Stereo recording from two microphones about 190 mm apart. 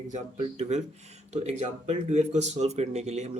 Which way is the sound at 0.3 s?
35° right (ahead or behind).